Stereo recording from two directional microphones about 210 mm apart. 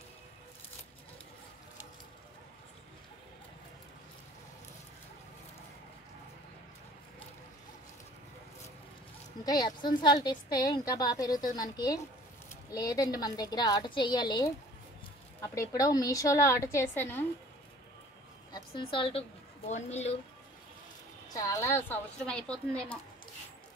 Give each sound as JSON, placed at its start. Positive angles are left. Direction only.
{"t": 9.4, "sound": "a woman's voice", "side_deg": 20}
{"t": 18.5, "sound": "a woman's voice", "side_deg": 25}
{"t": 21.3, "sound": "a woman's voice", "side_deg": 15}